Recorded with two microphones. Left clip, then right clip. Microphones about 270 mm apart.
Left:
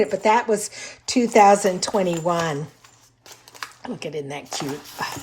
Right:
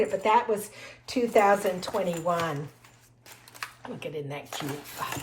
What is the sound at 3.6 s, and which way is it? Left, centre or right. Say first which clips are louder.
Speech: left 5 dB; centre.